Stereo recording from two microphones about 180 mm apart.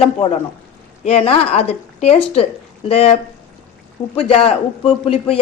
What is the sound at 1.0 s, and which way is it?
A woman's voice, 30° left (ahead or behind).